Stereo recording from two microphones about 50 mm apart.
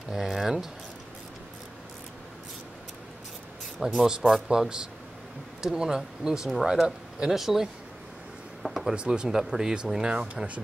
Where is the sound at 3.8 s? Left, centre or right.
Centre.